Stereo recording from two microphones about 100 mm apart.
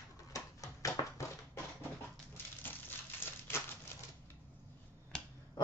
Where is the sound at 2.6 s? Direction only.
20° left (ahead or behind).